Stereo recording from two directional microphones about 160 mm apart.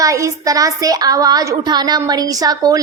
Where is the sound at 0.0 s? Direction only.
20° right (ahead or behind).